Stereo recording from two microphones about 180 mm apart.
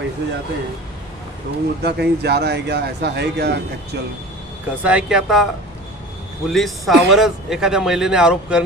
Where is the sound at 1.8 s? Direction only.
65° right (ahead or behind).